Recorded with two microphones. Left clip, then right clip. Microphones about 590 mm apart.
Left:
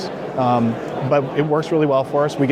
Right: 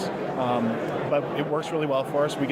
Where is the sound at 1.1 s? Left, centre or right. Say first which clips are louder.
Left 9 dB; left.